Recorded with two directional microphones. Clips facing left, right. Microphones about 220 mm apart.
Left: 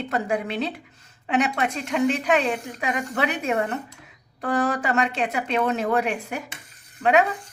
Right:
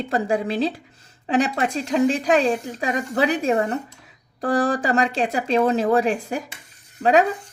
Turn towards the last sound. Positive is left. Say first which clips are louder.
# right 2 dB
turn(degrees=-35)  # may be behind; listen again after turning